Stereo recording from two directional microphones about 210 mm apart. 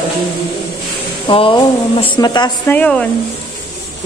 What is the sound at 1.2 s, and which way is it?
Speech, 25° left (ahead or behind).